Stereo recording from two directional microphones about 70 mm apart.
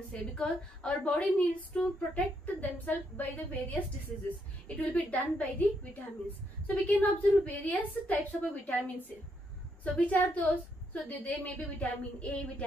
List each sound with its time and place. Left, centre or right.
0.1 s a woman's voice: centre
2.4 s a woman's voice: left